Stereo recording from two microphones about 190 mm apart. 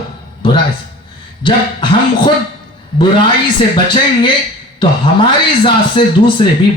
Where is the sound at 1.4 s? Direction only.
25° left (ahead or behind).